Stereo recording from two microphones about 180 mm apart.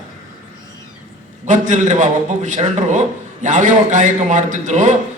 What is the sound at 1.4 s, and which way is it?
A man's voice, 45° right (ahead or behind).